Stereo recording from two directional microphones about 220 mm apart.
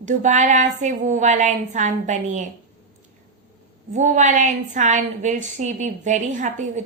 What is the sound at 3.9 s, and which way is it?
A woman's voice, 35° right (ahead or behind).